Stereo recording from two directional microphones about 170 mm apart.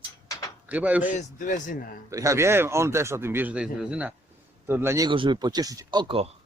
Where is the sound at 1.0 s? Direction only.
50° left (ahead or behind).